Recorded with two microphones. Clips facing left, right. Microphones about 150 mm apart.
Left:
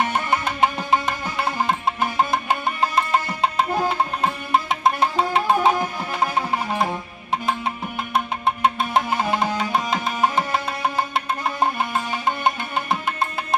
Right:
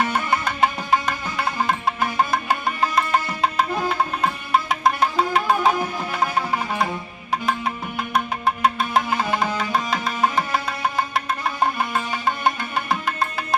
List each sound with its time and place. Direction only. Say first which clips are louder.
0.0 s music: even; 20° left (ahead or behind)
7.4 s music: right 1 dB; 25° left (ahead or behind)